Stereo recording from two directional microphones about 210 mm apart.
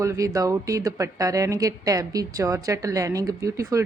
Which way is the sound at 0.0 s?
15° right (ahead or behind).